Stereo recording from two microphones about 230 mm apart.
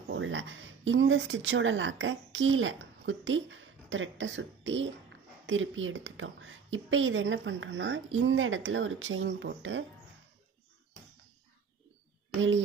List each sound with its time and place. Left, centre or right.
0.1 s a woman's voice: right
12.4 s a woman's voice: right